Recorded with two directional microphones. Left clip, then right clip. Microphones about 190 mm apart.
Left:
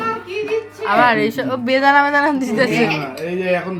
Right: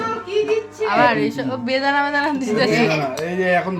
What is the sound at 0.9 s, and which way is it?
A woman's voice, 15° left (ahead or behind).